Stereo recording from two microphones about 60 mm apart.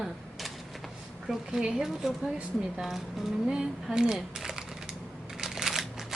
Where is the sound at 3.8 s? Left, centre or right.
Centre.